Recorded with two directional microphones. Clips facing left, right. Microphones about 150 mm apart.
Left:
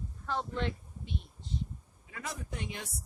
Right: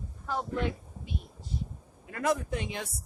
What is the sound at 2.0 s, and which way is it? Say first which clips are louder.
Speech: right 13 dB; 60° right (ahead or behind).